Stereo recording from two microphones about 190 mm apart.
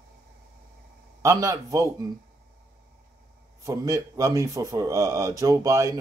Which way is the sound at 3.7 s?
15° right (ahead or behind).